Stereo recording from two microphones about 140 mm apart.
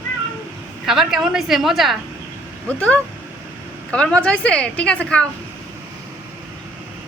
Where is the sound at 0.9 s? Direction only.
5° right (ahead or behind).